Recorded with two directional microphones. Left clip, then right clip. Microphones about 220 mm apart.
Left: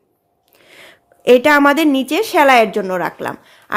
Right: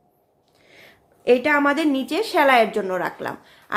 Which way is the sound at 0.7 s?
35° left (ahead or behind).